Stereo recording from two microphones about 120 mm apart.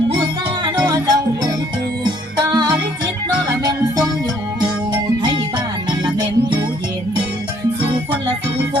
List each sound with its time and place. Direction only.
0.1 s music: 45° right (ahead or behind)
0.9 s music: 30° right (ahead or behind)